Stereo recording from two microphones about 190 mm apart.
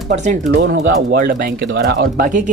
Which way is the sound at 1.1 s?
50° right (ahead or behind).